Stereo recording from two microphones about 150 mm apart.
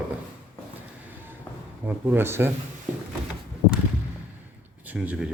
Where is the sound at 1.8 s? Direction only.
10° right (ahead or behind).